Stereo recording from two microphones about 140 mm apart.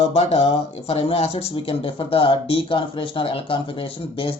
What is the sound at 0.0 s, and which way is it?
Speech, 45° left (ahead or behind).